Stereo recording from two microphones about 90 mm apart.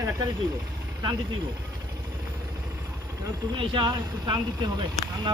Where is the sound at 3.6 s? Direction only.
60° right (ahead or behind).